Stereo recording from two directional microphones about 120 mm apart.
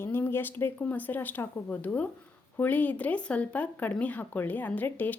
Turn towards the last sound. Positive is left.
turn(degrees=15)  # may be behind; listen again after turning